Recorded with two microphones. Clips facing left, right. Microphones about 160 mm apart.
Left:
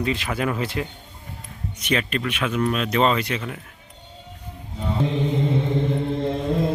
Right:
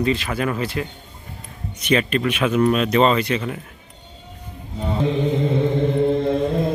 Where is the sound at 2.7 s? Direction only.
Centre (ahead or behind).